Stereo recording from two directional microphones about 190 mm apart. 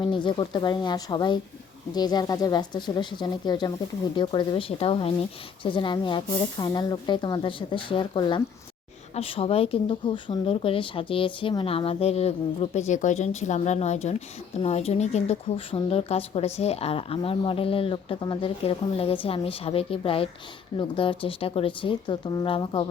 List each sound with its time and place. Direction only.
0.0 s speech: 25° left (ahead or behind)